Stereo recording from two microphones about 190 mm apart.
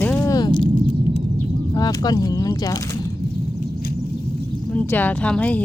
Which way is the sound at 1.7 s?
20° left (ahead or behind).